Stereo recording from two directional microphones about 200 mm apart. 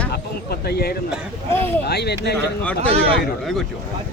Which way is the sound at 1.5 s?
10° left (ahead or behind).